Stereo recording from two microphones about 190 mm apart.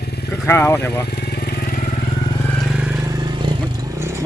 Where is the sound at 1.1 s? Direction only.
60° left (ahead or behind).